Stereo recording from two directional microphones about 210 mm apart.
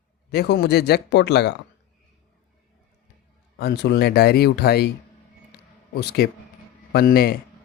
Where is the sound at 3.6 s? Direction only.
50° left (ahead or behind).